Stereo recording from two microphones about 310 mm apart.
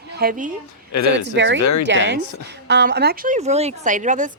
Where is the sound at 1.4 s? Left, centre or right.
Right.